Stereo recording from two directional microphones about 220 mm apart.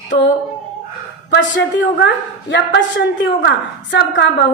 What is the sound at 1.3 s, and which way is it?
A woman's voice, 55° left (ahead or behind).